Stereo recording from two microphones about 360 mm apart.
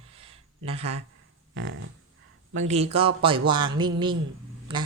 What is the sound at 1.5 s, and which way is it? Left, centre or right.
Speech, right.